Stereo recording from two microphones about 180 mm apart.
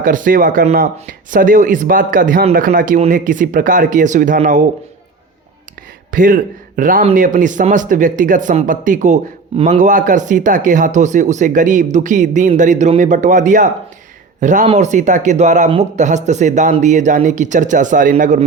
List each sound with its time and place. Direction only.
0.0 s speech: 45° right (ahead or behind)
6.1 s speech: 50° right (ahead or behind)